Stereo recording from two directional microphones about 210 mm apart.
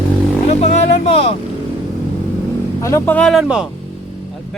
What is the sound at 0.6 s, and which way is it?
Speech, 30° left (ahead or behind).